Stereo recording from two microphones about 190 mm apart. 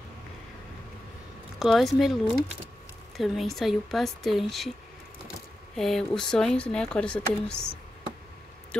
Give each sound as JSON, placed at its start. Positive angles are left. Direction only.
{"t": 1.6, "sound": "speech", "side_deg": 0}
{"t": 5.8, "sound": "speech", "side_deg": 0}